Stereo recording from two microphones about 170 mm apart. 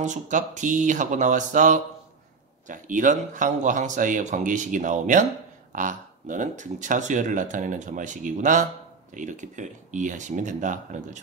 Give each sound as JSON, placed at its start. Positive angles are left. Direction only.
{"t": 0.0, "sound": "speech", "side_deg": -45}